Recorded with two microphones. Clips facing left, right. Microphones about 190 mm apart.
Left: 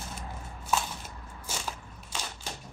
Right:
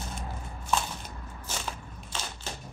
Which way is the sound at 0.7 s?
5° left (ahead or behind).